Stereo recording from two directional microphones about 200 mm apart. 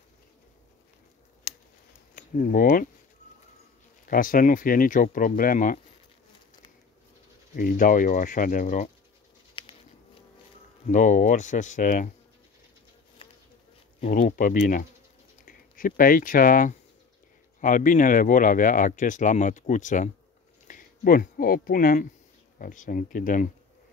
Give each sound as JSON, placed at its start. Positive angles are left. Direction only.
{"t": 2.1, "sound": "speech", "side_deg": 45}
{"t": 4.1, "sound": "speech", "side_deg": 45}
{"t": 7.5, "sound": "speech", "side_deg": 45}
{"t": 9.6, "sound": "patter", "side_deg": 25}
{"t": 10.9, "sound": "speech", "side_deg": 40}
{"t": 14.0, "sound": "speech", "side_deg": 40}